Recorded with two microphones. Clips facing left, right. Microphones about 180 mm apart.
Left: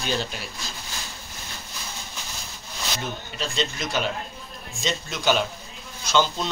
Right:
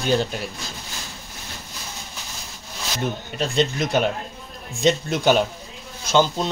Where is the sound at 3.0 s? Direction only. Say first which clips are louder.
Right 10 dB; 55° right (ahead or behind).